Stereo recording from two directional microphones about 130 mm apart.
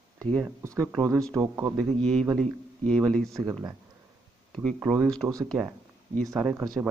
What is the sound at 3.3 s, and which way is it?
Speech, 25° right (ahead or behind).